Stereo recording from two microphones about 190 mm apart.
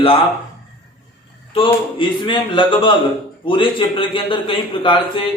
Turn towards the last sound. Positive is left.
turn(degrees=25)  # may be behind; listen again after turning